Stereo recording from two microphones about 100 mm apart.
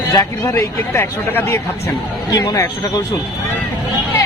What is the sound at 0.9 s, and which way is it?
Speech, 20° left (ahead or behind).